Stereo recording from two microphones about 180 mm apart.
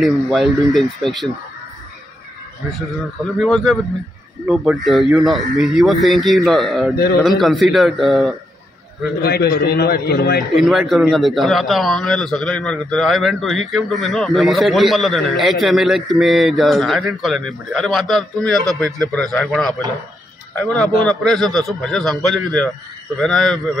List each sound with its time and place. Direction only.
0.0 s a man's voice: centre (ahead or behind)
3.3 s a man's voice: centre (ahead or behind)
9.2 s a man's voice: 60° left (ahead or behind)
10.5 s a man's voice: centre (ahead or behind)